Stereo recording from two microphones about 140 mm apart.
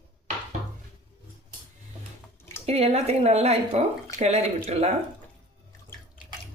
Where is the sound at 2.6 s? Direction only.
45° right (ahead or behind).